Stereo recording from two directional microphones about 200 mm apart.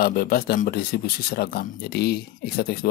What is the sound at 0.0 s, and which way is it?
Speech, 50° left (ahead or behind).